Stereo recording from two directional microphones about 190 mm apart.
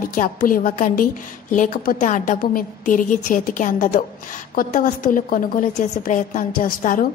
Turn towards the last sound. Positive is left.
turn(degrees=50)  # may be behind; listen again after turning